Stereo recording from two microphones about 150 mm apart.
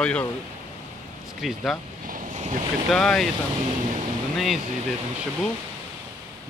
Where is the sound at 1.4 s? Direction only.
Centre (ahead or behind).